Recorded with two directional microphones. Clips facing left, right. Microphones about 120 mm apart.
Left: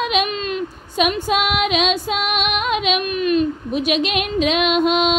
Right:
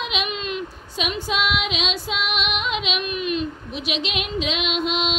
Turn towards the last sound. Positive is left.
turn(degrees=50)  # may be behind; listen again after turning